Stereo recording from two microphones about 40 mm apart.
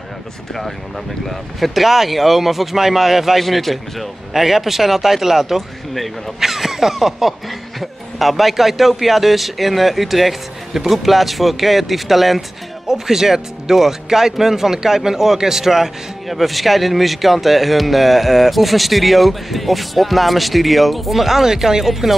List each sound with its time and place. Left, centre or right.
1.2 s speech: centre